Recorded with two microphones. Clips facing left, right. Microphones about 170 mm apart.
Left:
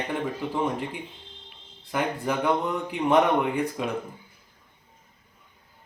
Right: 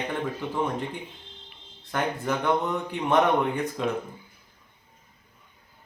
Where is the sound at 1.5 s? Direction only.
10° left (ahead or behind).